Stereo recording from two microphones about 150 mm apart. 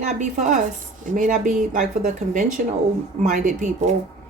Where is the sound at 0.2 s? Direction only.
55° right (ahead or behind).